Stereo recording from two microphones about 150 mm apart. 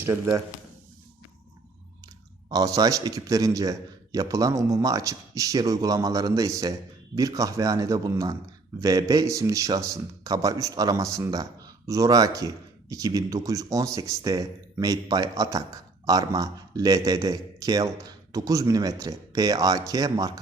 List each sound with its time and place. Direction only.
0.0 s speech: 20° right (ahead or behind)
2.5 s speech: 25° right (ahead or behind)